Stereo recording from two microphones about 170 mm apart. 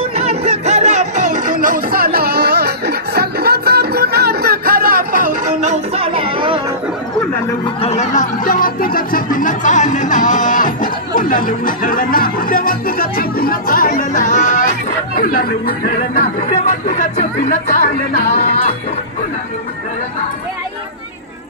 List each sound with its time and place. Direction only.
0.2 s music: 35° right (ahead or behind)
7.6 s speech: 35° left (ahead or behind); by 16.3 s 60° left (ahead or behind)
16.8 s speech: 45° left (ahead or behind)